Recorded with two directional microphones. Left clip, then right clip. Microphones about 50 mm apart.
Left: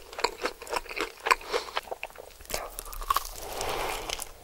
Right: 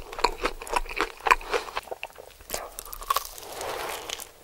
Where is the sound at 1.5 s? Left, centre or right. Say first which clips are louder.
Right 3 dB; centre.